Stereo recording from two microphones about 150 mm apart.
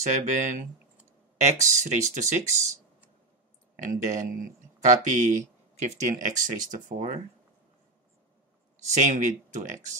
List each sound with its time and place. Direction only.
0.0 s speech: 55° right (ahead or behind)
3.8 s speech: 60° right (ahead or behind)
5.8 s speech: 50° right (ahead or behind)
8.9 s speech: 55° right (ahead or behind)